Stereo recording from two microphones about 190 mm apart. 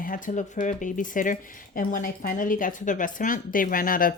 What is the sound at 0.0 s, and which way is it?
Speech, 45° left (ahead or behind).